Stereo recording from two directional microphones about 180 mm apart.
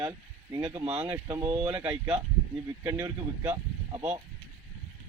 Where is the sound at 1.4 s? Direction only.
30° right (ahead or behind).